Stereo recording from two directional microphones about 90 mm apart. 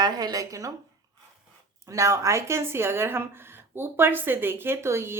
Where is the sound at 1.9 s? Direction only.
35° right (ahead or behind).